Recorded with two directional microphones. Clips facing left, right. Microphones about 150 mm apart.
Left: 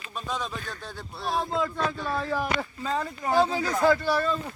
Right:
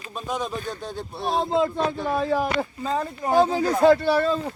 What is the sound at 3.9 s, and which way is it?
Speech, 60° right (ahead or behind).